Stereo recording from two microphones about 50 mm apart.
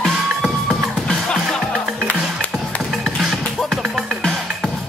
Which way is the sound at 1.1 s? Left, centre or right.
Centre.